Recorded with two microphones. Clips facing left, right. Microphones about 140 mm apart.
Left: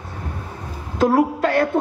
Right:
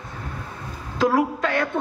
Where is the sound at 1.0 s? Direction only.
35° left (ahead or behind).